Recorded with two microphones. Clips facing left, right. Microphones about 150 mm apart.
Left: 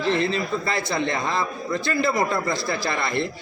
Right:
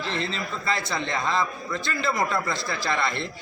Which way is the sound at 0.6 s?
40° left (ahead or behind).